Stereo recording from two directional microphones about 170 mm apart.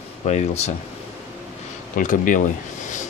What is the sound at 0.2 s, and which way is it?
Speech, 40° left (ahead or behind).